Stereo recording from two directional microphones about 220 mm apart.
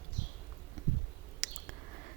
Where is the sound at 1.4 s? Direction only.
35° right (ahead or behind).